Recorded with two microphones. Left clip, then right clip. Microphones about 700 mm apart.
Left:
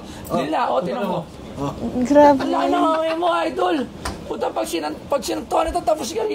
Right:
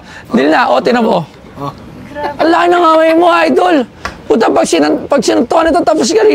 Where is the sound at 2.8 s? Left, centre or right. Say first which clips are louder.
Right 12 dB; right.